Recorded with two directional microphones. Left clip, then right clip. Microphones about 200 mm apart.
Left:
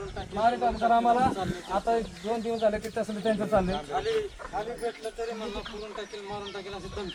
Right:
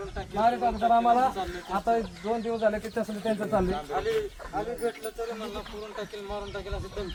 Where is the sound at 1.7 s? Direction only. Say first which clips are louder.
Right 1 dB; 30° left (ahead or behind).